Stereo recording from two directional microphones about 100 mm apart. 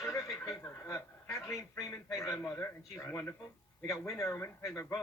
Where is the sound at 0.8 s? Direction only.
30° left (ahead or behind).